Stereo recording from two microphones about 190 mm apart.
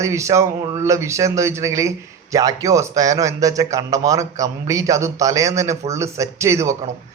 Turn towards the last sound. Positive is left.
turn(degrees=-15)  # may be behind; listen again after turning